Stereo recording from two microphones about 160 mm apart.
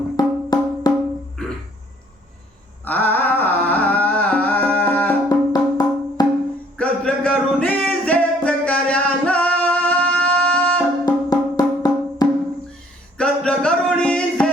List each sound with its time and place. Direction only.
0.2 s music: 25° left (ahead or behind)
2.8 s music: 10° left (ahead or behind)
5.3 s music: 25° left (ahead or behind)
6.7 s music: 5° left (ahead or behind)
11.0 s music: 25° left (ahead or behind)
13.1 s music: 5° left (ahead or behind)